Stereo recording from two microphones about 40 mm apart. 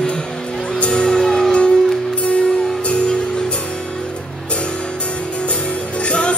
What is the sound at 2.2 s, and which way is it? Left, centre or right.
Music, left.